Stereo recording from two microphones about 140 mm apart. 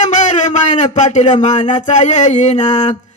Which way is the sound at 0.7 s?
55° left (ahead or behind).